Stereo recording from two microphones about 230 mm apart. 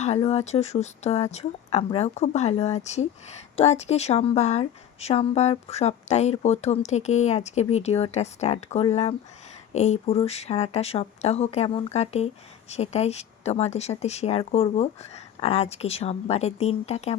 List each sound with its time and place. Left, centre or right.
0.0 s a woman's voice: left